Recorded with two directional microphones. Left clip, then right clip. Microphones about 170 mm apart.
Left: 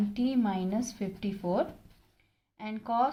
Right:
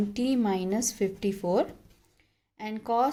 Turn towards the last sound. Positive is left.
turn(degrees=-45)  # may be behind; listen again after turning